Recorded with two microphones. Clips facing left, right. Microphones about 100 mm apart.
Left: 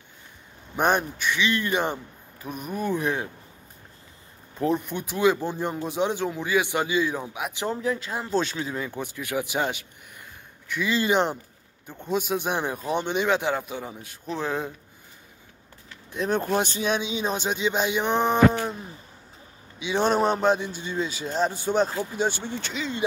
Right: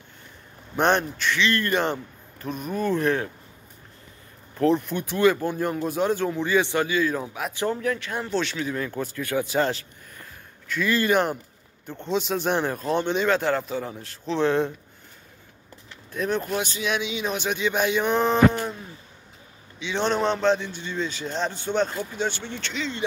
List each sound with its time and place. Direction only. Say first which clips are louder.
0.7 s a man's voice: right 1 dB; 10° left (ahead or behind)
4.6 s a man's voice: right 4 dB; 15° left (ahead or behind)
7.8 s speech: right 1 dB; 25° left (ahead or behind)
8.6 s a man's voice: right 3 dB; 15° left (ahead or behind)
11.9 s a man's voice: right 1 dB; 10° left (ahead or behind)
16.3 s speech: left 3 dB; 40° left (ahead or behind); by 18.4 s 20° left (ahead or behind)
19.8 s a man's voice: left 2 dB; 10° left (ahead or behind)